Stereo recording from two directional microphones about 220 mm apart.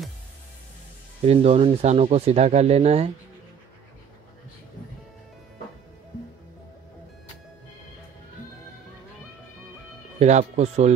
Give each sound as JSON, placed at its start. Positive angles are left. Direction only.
{"t": 1.2, "sound": "speech", "side_deg": -25}
{"t": 10.1, "sound": "speech", "side_deg": -30}